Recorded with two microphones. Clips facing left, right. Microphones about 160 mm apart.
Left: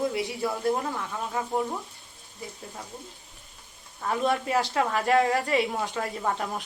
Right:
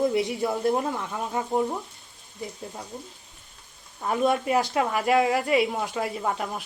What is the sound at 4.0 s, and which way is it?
A woman's voice, 15° right (ahead or behind).